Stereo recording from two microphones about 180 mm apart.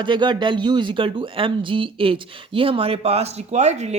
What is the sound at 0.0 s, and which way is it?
A woman's voice, 25° right (ahead or behind).